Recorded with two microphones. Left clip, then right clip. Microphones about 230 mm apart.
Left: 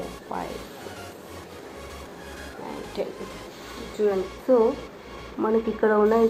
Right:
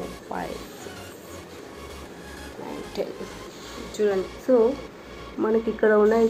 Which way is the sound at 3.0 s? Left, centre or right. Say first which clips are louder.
Right 1 dB; centre.